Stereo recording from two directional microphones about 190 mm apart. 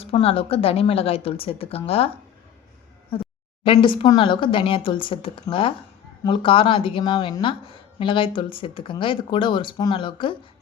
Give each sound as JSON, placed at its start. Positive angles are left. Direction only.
{"t": 0.0, "sound": "a woman's voice", "side_deg": 30}
{"t": 3.1, "sound": "a woman's voice", "side_deg": 30}